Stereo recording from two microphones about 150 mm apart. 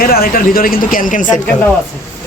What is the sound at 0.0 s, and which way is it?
Speech, 80° left.